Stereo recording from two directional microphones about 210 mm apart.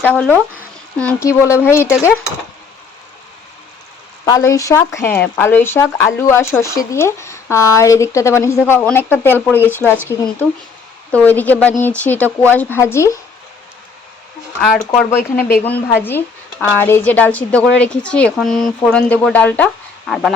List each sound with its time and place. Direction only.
0.0 s speech: 10° left (ahead or behind)
4.3 s speech: 15° left (ahead or behind)
15.1 s speech: 10° left (ahead or behind)